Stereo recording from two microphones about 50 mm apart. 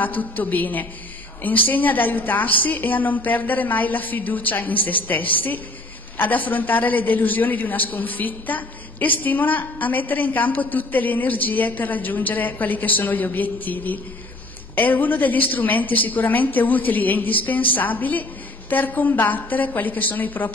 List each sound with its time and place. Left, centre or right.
0.0 s a man's voice: left